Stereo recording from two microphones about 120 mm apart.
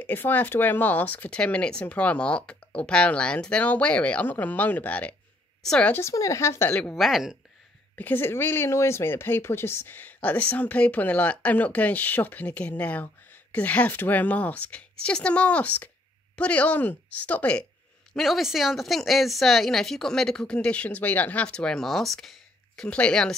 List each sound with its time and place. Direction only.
0.0 s a woman's voice: 15° left (ahead or behind)
5.9 s speech: 25° left (ahead or behind)
7.0 s a woman's voice: centre (ahead or behind)
7.9 s speech: 15° left (ahead or behind)
18.1 s a woman's voice: centre (ahead or behind)